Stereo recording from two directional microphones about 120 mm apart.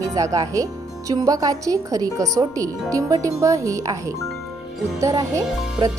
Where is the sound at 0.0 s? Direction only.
30° right (ahead or behind).